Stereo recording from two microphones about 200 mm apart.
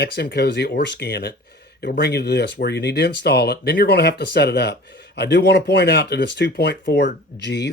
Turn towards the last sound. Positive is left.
turn(degrees=55)  # may be behind; listen again after turning